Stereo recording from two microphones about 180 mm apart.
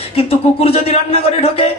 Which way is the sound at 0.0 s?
35° left (ahead or behind).